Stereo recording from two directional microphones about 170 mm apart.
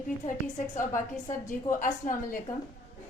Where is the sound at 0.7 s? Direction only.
50° left (ahead or behind).